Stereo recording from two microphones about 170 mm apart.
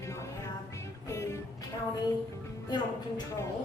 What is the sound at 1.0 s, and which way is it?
Music, 15° left (ahead or behind).